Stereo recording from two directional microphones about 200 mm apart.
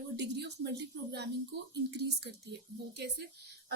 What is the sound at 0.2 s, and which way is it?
Speech, 55° right (ahead or behind).